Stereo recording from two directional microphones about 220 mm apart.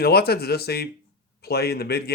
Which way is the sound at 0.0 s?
45° left (ahead or behind).